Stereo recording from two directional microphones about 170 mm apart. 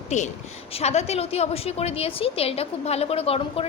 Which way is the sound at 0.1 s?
40° left (ahead or behind).